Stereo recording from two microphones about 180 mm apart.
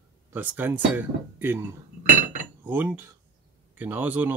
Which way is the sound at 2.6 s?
10° right (ahead or behind).